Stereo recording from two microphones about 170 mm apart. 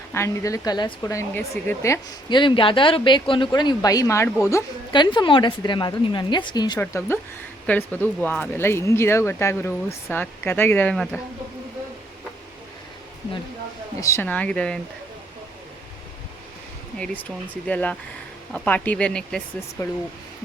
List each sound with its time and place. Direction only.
0.1 s speech: 15° left (ahead or behind)
6.7 s speech: 15° left (ahead or behind)
14.0 s speech: 15° left (ahead or behind)
17.0 s speech: 10° left (ahead or behind)
19.8 s speech: 20° left (ahead or behind)